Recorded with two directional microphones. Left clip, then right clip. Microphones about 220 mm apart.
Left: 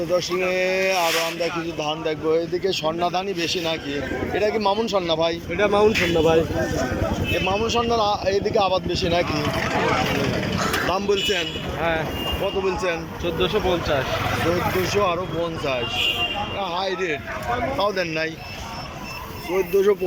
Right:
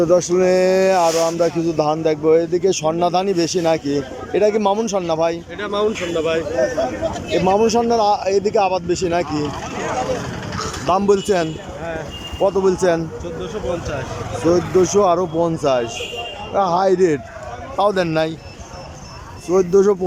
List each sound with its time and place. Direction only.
0.1 s speech: 25° right (ahead or behind)
5.5 s speech: 10° left (ahead or behind)
7.4 s speech: 25° right (ahead or behind)
10.8 s speech: 15° right (ahead or behind)
11.8 s speech: 5° right (ahead or behind)
12.6 s speech: 30° right (ahead or behind)
14.5 s speech: 30° right (ahead or behind)
17.7 s speech: 15° right (ahead or behind)
19.7 s speech: 25° right (ahead or behind)